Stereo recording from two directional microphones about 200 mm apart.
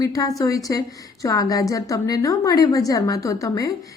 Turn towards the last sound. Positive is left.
turn(degrees=15)  # may be behind; listen again after turning